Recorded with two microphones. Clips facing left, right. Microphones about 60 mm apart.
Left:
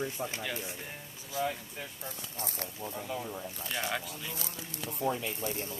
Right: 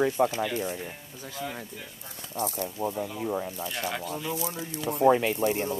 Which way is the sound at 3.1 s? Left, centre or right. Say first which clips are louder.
Right 7 dB; right.